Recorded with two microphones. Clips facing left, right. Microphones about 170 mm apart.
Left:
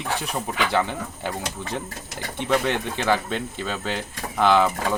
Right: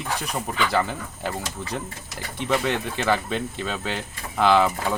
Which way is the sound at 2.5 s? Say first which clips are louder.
Left 1 dB; 5° right (ahead or behind).